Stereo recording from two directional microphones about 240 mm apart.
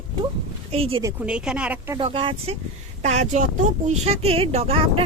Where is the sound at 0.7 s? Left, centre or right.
Right.